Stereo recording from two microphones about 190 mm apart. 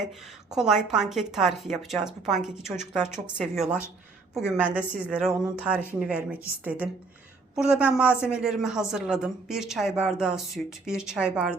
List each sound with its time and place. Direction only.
0.5 s a woman's voice: centre (ahead or behind)
7.5 s a woman's voice: 5° right (ahead or behind)